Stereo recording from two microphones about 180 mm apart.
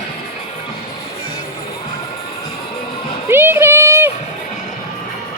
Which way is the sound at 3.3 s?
10° right (ahead or behind).